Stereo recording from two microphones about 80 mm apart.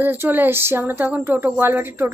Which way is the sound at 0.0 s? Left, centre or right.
Right.